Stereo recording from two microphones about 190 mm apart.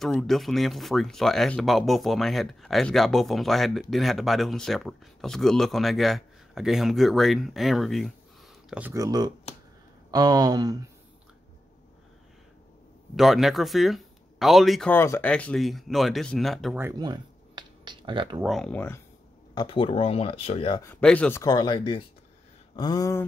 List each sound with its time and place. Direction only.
0.0 s speech: centre (ahead or behind)
8.9 s speech: 20° right (ahead or behind)
13.1 s speech: centre (ahead or behind)
17.0 s a sound: 20° right (ahead or behind)
18.4 s speech: centre (ahead or behind)
19.5 s speech: 25° left (ahead or behind)
20.8 s speech: 10° left (ahead or behind)